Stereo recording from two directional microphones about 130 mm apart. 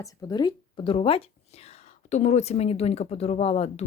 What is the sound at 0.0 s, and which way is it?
Speech, 30° left (ahead or behind).